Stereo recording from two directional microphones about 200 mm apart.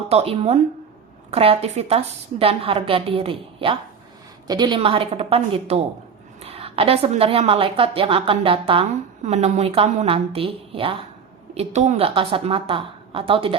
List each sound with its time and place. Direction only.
0.1 s a woman's voice: 30° right (ahead or behind)